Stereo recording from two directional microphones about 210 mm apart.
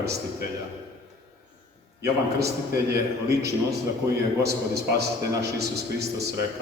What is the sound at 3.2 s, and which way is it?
Speech, 15° right (ahead or behind).